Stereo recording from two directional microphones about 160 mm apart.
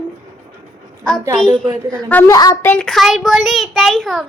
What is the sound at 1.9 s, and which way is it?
Speech, 10° left (ahead or behind).